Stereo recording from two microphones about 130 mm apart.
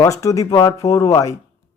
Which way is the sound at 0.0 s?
25° left (ahead or behind).